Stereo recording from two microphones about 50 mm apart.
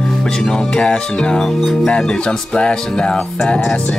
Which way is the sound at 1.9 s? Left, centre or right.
Centre.